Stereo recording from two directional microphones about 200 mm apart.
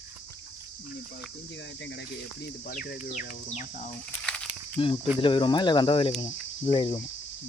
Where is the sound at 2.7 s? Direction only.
40° left (ahead or behind).